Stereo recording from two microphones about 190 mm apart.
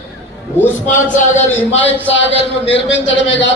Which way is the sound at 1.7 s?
80° left.